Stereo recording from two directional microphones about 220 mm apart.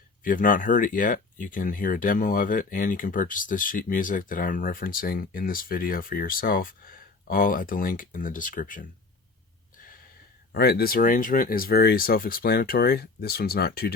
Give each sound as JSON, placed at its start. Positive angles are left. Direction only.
{"t": 0.2, "sound": "speech", "side_deg": 40}
{"t": 10.5, "sound": "speech", "side_deg": 45}